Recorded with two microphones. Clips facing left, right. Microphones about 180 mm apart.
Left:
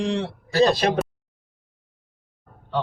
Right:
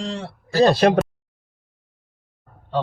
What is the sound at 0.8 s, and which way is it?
Speech, 55° right (ahead or behind).